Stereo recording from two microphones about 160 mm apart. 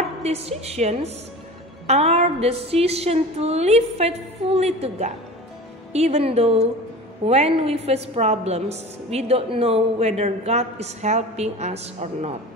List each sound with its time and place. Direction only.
0.2 s a woman's voice: 40° right (ahead or behind)